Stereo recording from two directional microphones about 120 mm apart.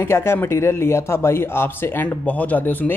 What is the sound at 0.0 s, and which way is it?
A man's voice, 20° left (ahead or behind).